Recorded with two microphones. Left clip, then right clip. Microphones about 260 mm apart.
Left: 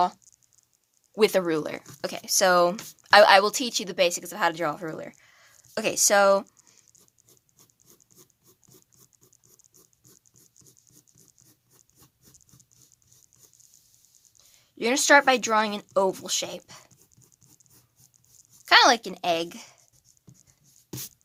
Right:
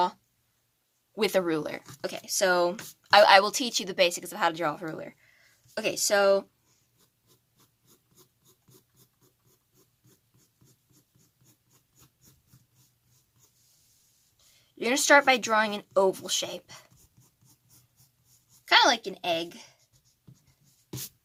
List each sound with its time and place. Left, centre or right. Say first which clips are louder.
1.1 s a woman's voice: left 4 dB; centre
5.7 s a woman's voice: left 4 dB; left
14.8 s a woman's voice: left 2 dB; centre
18.6 s a woman's voice: left 4 dB; left